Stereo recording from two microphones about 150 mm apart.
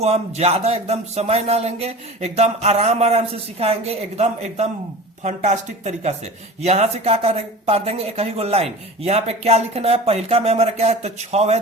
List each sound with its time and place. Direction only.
0.0 s speech: 45° right (ahead or behind)